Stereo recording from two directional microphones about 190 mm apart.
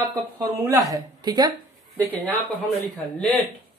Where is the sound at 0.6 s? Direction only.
15° right (ahead or behind).